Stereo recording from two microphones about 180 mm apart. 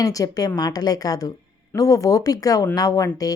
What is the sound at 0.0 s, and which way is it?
Speech, 20° left (ahead or behind).